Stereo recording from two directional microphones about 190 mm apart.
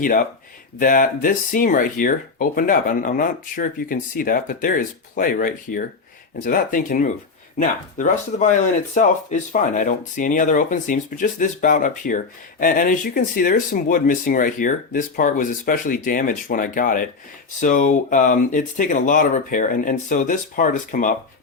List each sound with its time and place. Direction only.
0.0 s speech: 45° left (ahead or behind)